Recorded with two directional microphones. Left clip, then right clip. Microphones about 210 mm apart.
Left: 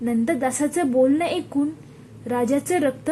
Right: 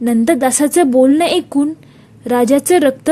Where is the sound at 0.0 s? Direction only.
45° right (ahead or behind).